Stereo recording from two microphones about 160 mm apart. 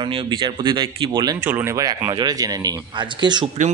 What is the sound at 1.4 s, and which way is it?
Speech, 15° right (ahead or behind).